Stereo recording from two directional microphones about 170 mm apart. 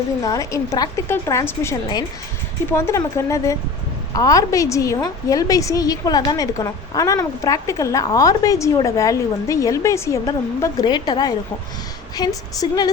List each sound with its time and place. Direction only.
0.2 s a woman's voice: 20° left (ahead or behind)